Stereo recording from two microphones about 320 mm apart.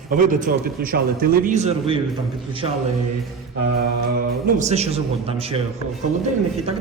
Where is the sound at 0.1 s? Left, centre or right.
Right.